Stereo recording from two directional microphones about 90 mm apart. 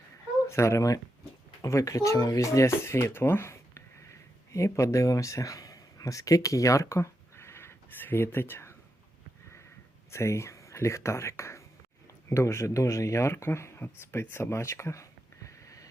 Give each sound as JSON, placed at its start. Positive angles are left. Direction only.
{"t": 0.4, "sound": "speech", "side_deg": 35}
{"t": 10.1, "sound": "speech", "side_deg": 30}
{"t": 14.1, "sound": "a sound", "side_deg": 25}